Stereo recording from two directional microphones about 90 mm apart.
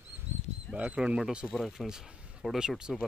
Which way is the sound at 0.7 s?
15° right (ahead or behind).